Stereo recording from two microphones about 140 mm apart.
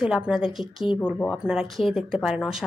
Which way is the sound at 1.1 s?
10° left (ahead or behind).